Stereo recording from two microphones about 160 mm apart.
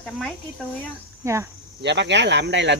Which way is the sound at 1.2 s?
15° right (ahead or behind).